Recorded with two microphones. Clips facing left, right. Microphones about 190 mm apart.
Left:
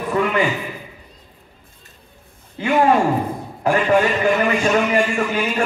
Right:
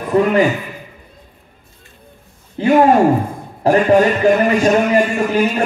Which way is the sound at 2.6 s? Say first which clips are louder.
Right 5 dB; 40° right (ahead or behind).